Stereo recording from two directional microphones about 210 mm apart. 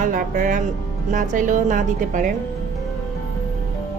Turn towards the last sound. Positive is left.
turn(degrees=-35)  # may be behind; listen again after turning